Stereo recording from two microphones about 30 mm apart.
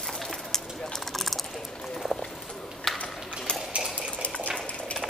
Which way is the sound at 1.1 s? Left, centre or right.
Centre.